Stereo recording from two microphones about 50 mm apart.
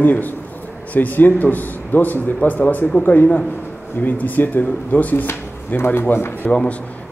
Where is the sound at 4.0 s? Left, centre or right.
Left.